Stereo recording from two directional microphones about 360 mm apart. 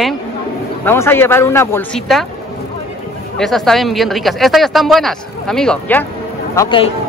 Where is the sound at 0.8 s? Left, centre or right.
Centre.